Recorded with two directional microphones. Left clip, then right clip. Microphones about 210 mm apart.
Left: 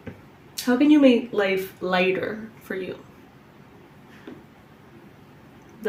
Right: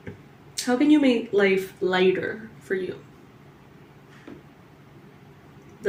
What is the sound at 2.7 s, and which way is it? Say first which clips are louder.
Speech: right 3 dB; 35° left (ahead or behind).